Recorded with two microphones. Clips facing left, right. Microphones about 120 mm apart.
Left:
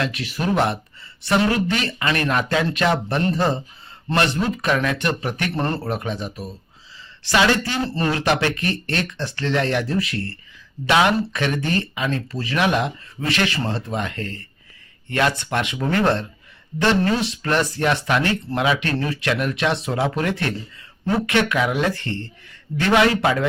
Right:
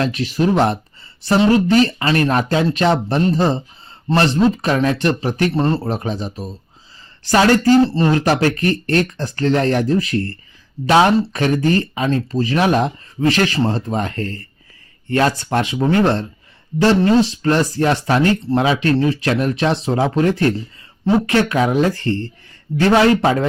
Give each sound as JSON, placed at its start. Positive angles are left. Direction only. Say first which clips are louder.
{"t": 0.0, "sound": "speech", "louder": "right 7 dB", "side_deg": -35}
{"t": 5.5, "sound": "speech", "louder": "right 5 dB", "side_deg": -20}